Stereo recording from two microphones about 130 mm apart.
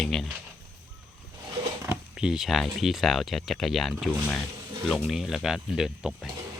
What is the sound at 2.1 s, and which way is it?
Speech, 5° right (ahead or behind).